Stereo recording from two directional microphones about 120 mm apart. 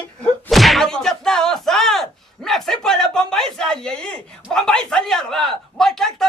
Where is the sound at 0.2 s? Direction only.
5° left (ahead or behind).